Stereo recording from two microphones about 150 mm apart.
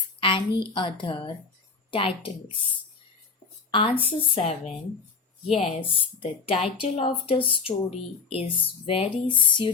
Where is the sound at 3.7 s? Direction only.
35° left (ahead or behind).